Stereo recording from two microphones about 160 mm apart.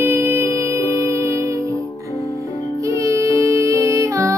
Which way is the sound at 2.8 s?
20° right (ahead or behind).